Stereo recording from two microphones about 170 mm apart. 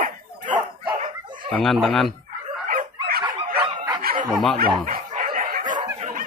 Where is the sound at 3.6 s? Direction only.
25° right (ahead or behind).